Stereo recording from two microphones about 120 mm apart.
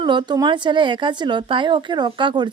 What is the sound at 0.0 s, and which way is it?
A woman's voice, 40° right (ahead or behind).